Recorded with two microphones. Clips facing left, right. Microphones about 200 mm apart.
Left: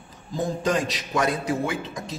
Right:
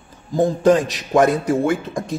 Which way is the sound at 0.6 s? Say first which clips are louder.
Right 10 dB; 50° right (ahead or behind).